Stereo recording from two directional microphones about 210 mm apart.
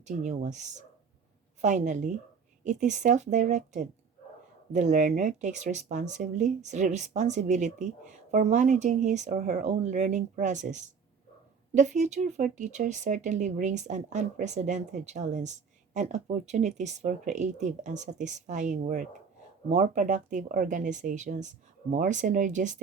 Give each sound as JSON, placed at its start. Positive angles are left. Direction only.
{"t": 0.0, "sound": "speech", "side_deg": -35}